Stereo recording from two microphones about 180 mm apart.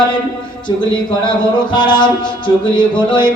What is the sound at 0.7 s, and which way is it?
Music, 25° left (ahead or behind).